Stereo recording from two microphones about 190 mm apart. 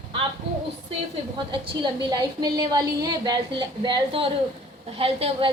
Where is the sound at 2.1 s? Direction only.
20° right (ahead or behind).